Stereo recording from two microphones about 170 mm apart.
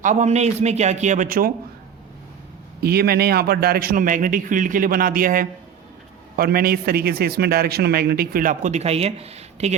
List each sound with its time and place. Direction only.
0.0 s a man's voice: 45° right (ahead or behind)
2.8 s a man's voice: 65° right (ahead or behind); by 9.7 s 40° right (ahead or behind)